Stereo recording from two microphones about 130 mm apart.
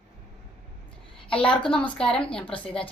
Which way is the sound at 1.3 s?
40° left (ahead or behind).